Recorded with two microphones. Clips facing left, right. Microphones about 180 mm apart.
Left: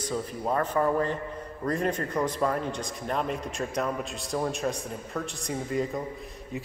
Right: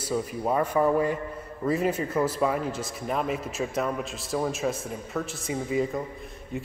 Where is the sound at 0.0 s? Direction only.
10° right (ahead or behind).